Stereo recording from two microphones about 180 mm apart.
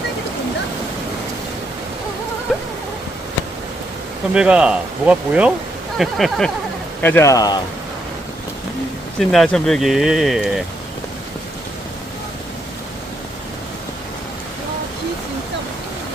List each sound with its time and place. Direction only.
4.4 s speech: 5° right (ahead or behind)
7.0 s speech: 15° left (ahead or behind)
9.3 s speech: centre (ahead or behind)